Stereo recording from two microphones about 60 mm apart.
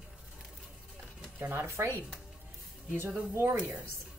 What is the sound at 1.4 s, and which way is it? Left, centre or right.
Speech, right.